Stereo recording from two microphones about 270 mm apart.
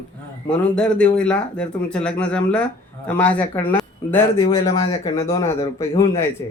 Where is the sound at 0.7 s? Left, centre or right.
Centre.